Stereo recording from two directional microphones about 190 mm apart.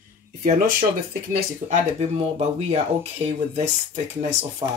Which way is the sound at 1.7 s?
35° right (ahead or behind).